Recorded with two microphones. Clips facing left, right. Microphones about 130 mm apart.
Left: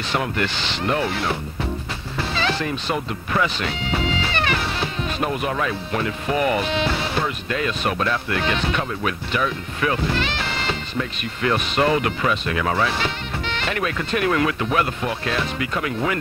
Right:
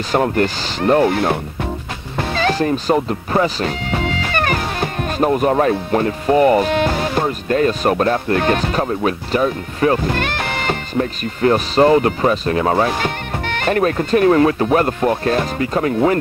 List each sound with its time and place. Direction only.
0.1 s speech: 40° right (ahead or behind)